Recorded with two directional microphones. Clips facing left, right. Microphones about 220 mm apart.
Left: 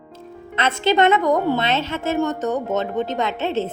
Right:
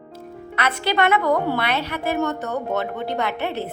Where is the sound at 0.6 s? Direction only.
25° left (ahead or behind).